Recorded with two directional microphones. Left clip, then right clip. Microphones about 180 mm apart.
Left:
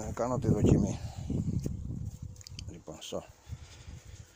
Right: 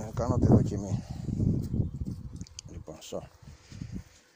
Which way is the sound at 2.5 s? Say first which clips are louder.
Even; centre (ahead or behind).